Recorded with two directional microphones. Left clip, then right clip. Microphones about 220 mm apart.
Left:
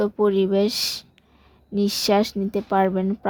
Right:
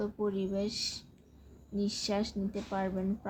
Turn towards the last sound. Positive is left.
turn(degrees=50)  # may be behind; listen again after turning